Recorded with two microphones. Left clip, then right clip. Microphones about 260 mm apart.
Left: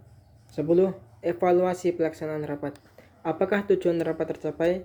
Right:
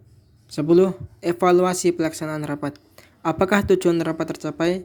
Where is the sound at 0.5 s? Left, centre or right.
Right.